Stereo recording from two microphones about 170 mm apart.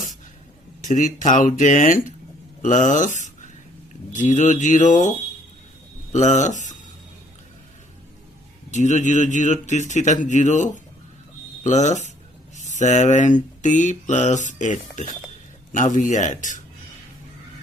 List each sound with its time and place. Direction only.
0.8 s speech: 50° left (ahead or behind)
8.7 s speech: 45° left (ahead or behind)